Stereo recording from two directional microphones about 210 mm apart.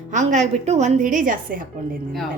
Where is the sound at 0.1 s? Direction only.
35° right (ahead or behind).